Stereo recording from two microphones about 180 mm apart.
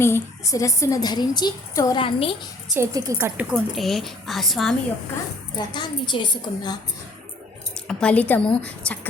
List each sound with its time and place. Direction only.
0.0 s a woman's voice: 15° left (ahead or behind)
2.7 s speech: 15° right (ahead or behind)
3.5 s speech: centre (ahead or behind)
5.5 s a woman's voice: 25° left (ahead or behind)
7.9 s a woman's voice: 5° left (ahead or behind)